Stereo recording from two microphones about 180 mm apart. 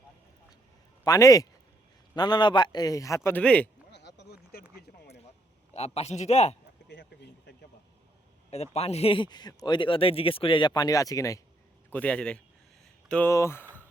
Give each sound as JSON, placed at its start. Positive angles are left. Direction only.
{"t": 1.0, "sound": "a man's voice", "side_deg": 20}
{"t": 3.9, "sound": "a sound", "side_deg": 70}
{"t": 5.7, "sound": "a man's voice", "side_deg": 35}
{"t": 6.8, "sound": "a sound", "side_deg": 70}
{"t": 8.4, "sound": "a man's voice", "side_deg": 35}
{"t": 11.9, "sound": "a man's voice", "side_deg": 10}